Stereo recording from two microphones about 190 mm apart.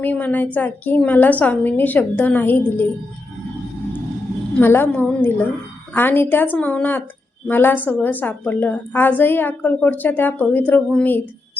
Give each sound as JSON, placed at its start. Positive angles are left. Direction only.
{"t": 0.0, "sound": "a woman's voice", "side_deg": 10}
{"t": 4.6, "sound": "a woman's voice", "side_deg": 10}